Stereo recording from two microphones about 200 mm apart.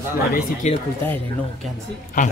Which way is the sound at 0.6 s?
35° left (ahead or behind).